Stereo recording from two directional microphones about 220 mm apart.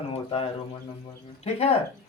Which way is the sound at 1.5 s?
30° left (ahead or behind).